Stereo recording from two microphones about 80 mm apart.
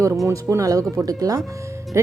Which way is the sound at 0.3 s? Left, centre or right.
Right.